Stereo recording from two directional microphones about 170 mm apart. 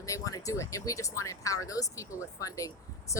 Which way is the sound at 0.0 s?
20° left (ahead or behind).